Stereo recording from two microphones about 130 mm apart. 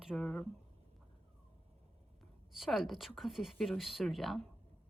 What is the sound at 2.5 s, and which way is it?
A woman's voice, centre (ahead or behind).